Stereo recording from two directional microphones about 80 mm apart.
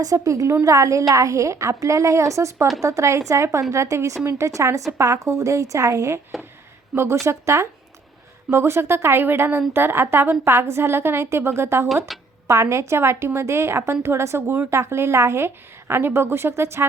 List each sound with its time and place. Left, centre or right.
0.0 s a woman's voice: right
12.1 s speech: centre
12.5 s a woman's voice: right